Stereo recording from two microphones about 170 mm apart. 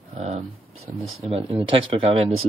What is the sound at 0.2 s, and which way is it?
Speech, 40° right (ahead or behind).